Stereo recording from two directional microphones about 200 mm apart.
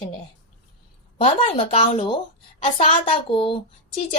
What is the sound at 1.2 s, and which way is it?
Speech, 30° left (ahead or behind).